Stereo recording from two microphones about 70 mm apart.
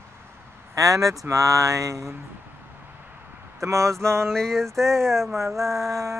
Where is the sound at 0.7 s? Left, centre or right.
Right.